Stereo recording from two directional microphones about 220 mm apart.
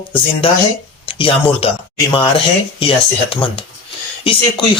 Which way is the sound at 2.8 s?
25° left (ahead or behind).